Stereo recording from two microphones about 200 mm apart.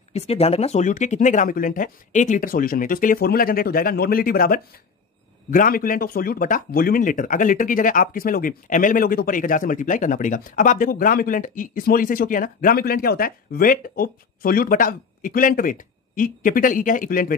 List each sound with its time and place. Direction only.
0.1 s speech: 30° left (ahead or behind)